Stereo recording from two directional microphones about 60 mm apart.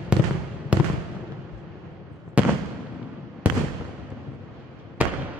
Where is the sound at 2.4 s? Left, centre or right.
Right.